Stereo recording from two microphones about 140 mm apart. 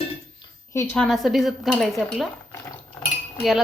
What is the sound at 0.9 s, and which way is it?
A woman's voice, centre (ahead or behind).